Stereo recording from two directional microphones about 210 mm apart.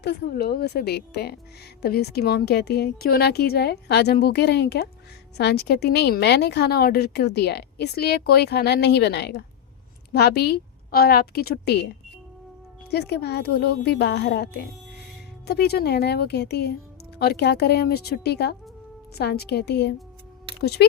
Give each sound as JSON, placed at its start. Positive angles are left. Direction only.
{"t": 0.0, "sound": "a woman's voice", "side_deg": 50}
{"t": 12.9, "sound": "a woman's voice", "side_deg": 50}